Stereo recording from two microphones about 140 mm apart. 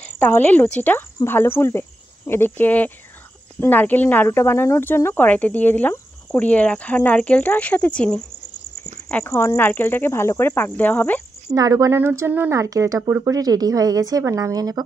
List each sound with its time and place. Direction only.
0.0 s speech: 15° left (ahead or behind)
11.5 s speech: 25° right (ahead or behind)